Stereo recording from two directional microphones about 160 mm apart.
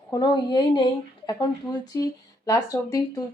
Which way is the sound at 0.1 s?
25° left (ahead or behind).